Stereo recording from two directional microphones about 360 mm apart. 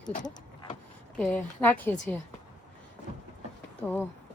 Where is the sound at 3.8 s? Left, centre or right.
Centre.